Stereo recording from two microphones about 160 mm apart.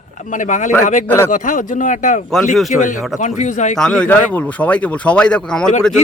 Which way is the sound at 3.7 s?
5° left (ahead or behind).